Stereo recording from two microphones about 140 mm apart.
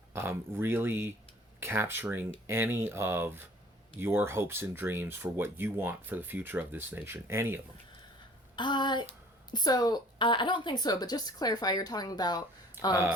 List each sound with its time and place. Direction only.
0.1 s speech: 15° right (ahead or behind)
8.5 s a woman's voice: 35° left (ahead or behind)
12.8 s speech: 15° right (ahead or behind)